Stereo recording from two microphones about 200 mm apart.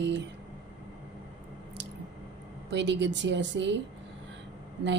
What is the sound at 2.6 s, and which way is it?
A woman's voice, 60° right (ahead or behind).